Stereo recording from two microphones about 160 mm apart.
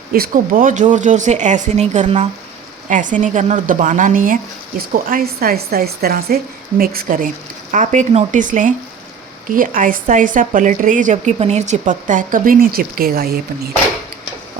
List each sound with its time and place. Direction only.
0.1 s a woman's voice: 65° right (ahead or behind)
7.7 s speech: 50° right (ahead or behind); by 13.4 s 70° right (ahead or behind)